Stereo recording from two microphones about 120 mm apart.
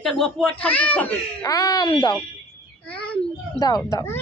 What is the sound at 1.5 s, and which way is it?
Speech, 30° left (ahead or behind).